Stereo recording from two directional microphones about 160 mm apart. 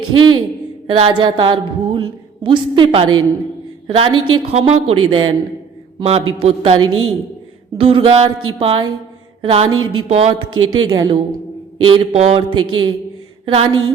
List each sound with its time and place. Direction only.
0.1 s a woman's voice: 25° right (ahead or behind)
9.4 s a sound: 35° right (ahead or behind)
9.6 s a woman's voice: 30° right (ahead or behind)
10.1 s a woman's voice: 40° right (ahead or behind)